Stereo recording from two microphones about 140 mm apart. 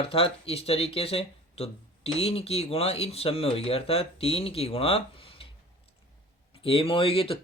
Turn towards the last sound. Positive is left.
turn(degrees=40)  # may be behind; listen again after turning